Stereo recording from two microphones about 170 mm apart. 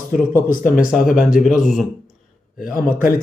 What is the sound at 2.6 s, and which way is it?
Speech, 55° left (ahead or behind).